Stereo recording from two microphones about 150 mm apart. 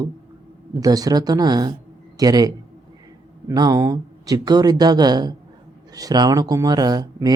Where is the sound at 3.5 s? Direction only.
25° right (ahead or behind).